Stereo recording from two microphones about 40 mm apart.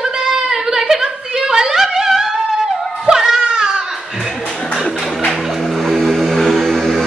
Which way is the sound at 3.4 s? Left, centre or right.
Centre.